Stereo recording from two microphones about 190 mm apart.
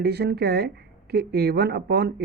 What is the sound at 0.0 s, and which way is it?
Speech, 60° right (ahead or behind).